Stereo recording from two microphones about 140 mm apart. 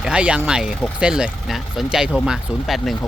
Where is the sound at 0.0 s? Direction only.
10° right (ahead or behind).